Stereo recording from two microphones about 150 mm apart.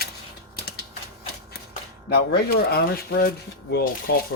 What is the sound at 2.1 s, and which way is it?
Speech, 90° left.